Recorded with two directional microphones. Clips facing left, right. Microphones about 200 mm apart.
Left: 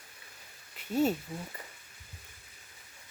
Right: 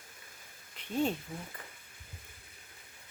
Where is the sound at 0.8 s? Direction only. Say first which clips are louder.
Left 4 dB; 5° left (ahead or behind).